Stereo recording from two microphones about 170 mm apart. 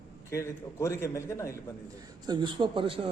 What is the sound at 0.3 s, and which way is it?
A man's voice, 15° left (ahead or behind).